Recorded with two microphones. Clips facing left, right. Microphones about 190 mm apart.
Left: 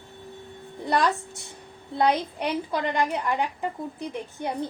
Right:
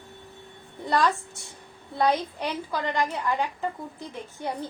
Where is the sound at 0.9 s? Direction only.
20° left (ahead or behind).